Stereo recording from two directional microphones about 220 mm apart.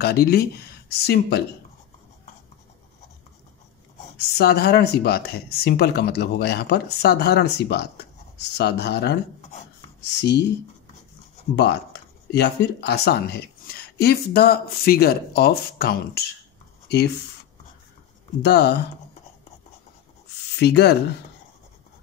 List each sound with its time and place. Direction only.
0.0 s speech: 45° left (ahead or behind)
4.4 s speech: 45° left (ahead or behind)
11.5 s speech: 50° left (ahead or behind)
18.4 s speech: 50° left (ahead or behind)
20.5 s speech: 50° left (ahead or behind)